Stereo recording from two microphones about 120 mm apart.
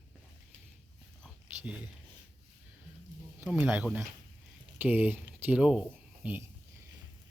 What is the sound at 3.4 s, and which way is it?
Speech, 15° right (ahead or behind).